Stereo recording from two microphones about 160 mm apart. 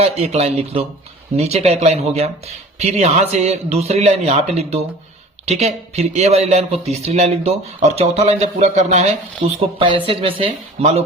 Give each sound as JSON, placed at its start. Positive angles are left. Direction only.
{"t": 0.0, "sound": "speech", "side_deg": -40}